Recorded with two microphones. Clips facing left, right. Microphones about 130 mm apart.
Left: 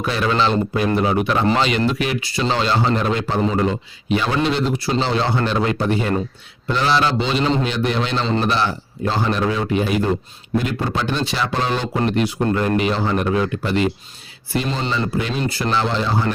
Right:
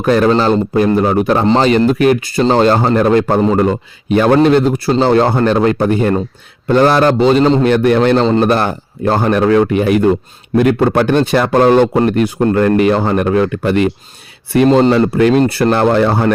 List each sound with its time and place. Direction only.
0.0 s speech: 45° right (ahead or behind)
7.7 s speech: 55° right (ahead or behind)